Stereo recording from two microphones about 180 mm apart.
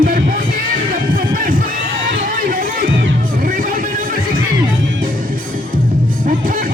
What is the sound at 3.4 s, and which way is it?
Music, 50° right (ahead or behind).